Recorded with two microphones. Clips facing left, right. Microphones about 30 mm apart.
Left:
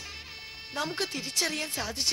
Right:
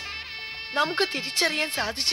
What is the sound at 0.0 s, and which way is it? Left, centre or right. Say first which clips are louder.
A woman's voice: right 8 dB; right.